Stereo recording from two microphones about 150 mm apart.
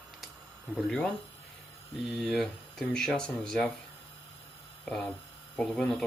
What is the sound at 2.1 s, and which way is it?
Speech, centre (ahead or behind).